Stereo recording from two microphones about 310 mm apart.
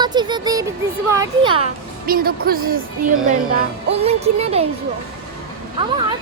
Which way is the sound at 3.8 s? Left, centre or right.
Centre.